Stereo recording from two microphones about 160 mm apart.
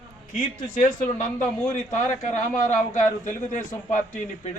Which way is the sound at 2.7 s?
50° left (ahead or behind).